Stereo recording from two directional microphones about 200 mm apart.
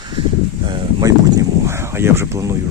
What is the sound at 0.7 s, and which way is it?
Speech, 20° right (ahead or behind).